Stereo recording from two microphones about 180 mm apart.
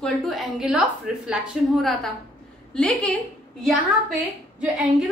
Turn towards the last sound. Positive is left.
turn(degrees=-5)  # may be behind; listen again after turning